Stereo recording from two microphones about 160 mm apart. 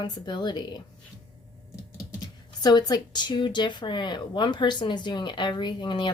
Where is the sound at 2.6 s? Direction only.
25° left (ahead or behind).